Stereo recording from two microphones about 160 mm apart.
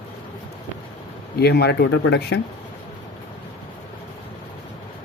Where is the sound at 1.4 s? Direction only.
90° left.